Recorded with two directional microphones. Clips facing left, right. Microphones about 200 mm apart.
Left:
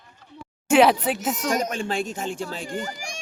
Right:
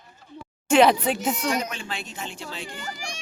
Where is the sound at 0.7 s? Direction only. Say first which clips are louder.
Left 1 dB; 5° left (ahead or behind).